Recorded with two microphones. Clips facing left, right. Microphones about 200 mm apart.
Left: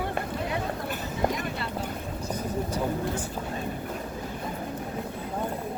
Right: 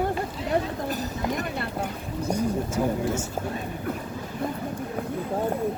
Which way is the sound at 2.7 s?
45° right (ahead or behind).